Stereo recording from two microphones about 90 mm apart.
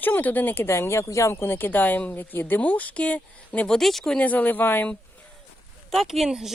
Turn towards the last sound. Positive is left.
turn(degrees=-5)  # may be behind; listen again after turning